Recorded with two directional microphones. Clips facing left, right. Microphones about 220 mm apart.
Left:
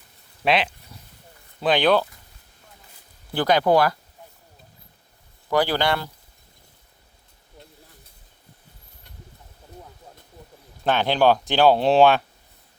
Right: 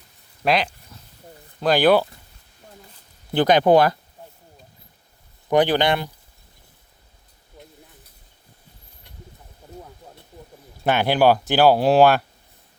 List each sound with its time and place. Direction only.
0.4 s speech: 5° left (ahead or behind)
3.3 s speech: 20° right (ahead or behind)
5.5 s speech: 20° right (ahead or behind)
10.8 s speech: 10° right (ahead or behind)